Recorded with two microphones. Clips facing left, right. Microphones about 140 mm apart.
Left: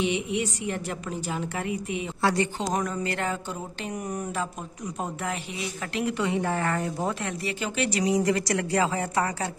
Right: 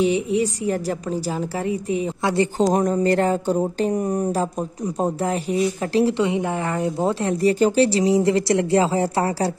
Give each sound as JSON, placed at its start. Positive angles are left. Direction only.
{"t": 0.0, "sound": "speech", "side_deg": -35}
{"t": 2.6, "sound": "speech", "side_deg": -40}